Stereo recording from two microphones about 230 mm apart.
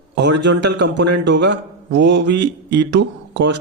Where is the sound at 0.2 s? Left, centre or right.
Right.